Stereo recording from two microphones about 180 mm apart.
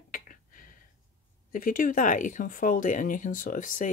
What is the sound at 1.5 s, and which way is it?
Speech, 50° left (ahead or behind).